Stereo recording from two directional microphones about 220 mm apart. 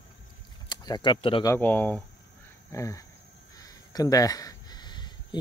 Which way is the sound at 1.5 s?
10° left (ahead or behind).